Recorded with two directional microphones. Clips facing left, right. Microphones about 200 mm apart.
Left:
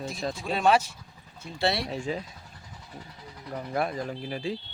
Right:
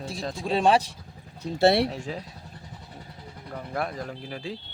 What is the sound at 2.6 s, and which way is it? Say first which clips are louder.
Vehicle: left 3 dB; 30° right (ahead or behind).